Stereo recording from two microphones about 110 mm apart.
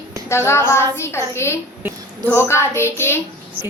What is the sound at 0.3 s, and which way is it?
A woman's voice, 25° left (ahead or behind).